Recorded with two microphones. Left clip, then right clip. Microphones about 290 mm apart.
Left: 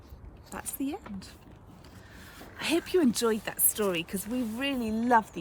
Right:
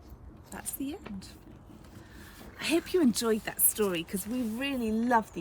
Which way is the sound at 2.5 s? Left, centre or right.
Centre.